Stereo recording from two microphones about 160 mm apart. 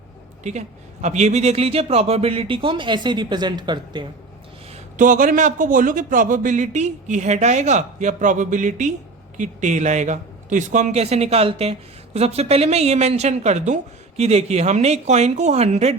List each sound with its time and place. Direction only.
1.0 s a man's voice: 45° right (ahead or behind); by 4.0 s 30° right (ahead or behind)
4.7 s a man's voice: 55° right (ahead or behind)